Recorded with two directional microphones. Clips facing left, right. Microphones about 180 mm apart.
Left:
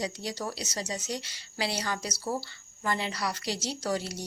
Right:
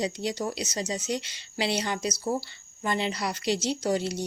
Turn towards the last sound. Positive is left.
turn(degrees=-20)  # may be behind; listen again after turning